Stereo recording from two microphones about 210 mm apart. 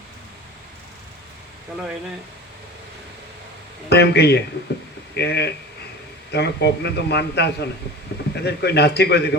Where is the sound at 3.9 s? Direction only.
50° left (ahead or behind).